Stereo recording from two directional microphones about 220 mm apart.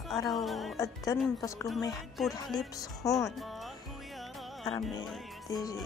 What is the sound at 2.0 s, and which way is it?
Speech, centre (ahead or behind).